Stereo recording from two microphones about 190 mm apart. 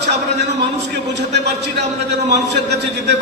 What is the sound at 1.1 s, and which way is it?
A man's voice, 65° right (ahead or behind).